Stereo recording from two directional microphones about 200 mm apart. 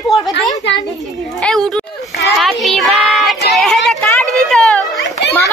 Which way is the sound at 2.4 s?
Centre (ahead or behind).